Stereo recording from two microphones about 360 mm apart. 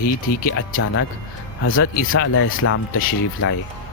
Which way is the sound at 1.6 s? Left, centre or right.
Left.